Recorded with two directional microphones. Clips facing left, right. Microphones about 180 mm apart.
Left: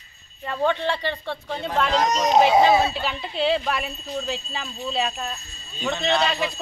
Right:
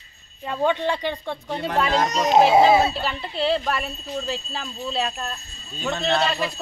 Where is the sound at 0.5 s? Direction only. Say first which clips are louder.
Right 1 dB; 15° right (ahead or behind).